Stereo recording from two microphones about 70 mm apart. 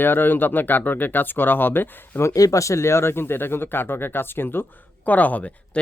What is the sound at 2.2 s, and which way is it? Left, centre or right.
Speech, left.